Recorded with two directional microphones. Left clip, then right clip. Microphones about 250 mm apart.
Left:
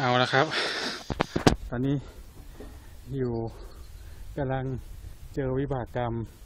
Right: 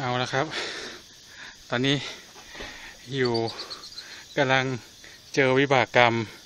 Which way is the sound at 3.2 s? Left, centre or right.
Centre.